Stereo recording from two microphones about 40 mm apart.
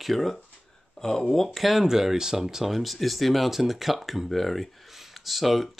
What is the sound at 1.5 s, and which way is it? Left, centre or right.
Speech, centre.